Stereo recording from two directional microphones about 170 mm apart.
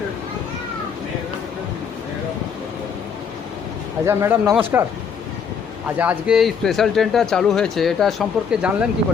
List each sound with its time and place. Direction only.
4.0 s speech: 15° right (ahead or behind)
6.0 s speech: 5° right (ahead or behind)